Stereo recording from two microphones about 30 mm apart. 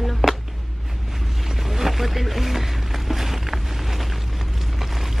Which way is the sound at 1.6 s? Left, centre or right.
Centre.